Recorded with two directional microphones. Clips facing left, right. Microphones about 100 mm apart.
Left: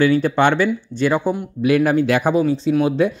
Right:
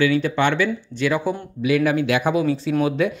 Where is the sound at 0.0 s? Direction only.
40° left (ahead or behind).